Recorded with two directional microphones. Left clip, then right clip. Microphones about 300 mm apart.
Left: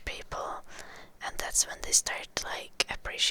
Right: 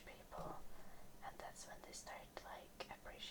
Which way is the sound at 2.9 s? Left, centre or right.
Left.